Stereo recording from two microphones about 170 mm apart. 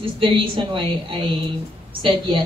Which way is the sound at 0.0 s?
30° right (ahead or behind).